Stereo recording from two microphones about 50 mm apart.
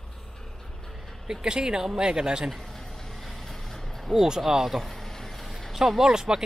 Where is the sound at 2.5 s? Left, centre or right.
Centre.